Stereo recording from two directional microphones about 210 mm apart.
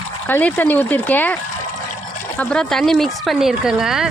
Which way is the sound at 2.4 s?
5° left (ahead or behind).